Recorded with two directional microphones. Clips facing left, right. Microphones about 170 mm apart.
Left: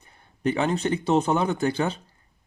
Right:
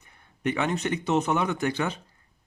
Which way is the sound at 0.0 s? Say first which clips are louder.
Left 3 dB; 35° left (ahead or behind).